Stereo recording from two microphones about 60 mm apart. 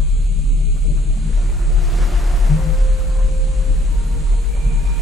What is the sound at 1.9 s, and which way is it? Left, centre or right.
Music, centre.